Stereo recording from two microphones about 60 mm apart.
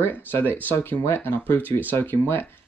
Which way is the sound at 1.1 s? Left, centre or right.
Left.